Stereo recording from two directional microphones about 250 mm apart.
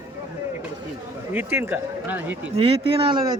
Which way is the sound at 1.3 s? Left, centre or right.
Centre.